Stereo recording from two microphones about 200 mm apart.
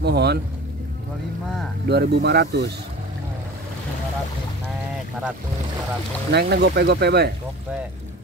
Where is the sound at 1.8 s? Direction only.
55° right (ahead or behind).